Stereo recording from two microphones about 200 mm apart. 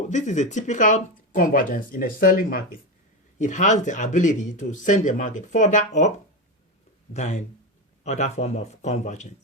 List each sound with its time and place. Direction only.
0.1 s speech: 35° left (ahead or behind)
7.1 s speech: 35° left (ahead or behind)